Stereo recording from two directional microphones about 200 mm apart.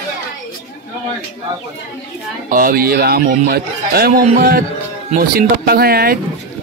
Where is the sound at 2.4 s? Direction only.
45° right (ahead or behind).